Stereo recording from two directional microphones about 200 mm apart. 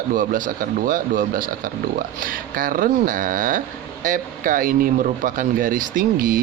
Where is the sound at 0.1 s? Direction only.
45° right (ahead or behind).